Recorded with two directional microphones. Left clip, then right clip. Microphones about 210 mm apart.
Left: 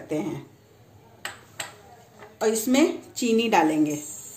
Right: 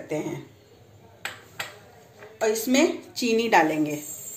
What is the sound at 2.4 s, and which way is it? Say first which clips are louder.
A woman's voice: even; 35° left (ahead or behind).